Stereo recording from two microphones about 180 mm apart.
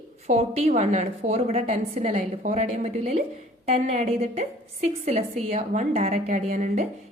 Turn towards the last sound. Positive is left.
turn(degrees=-40)  # may be behind; listen again after turning